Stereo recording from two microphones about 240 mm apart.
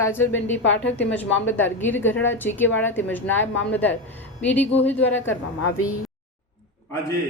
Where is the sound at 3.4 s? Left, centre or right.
Left.